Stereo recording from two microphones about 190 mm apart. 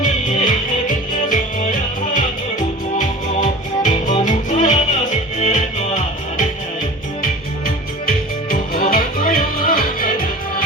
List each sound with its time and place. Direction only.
0.3 s music: 45° left (ahead or behind)
8.0 s music: 50° left (ahead or behind)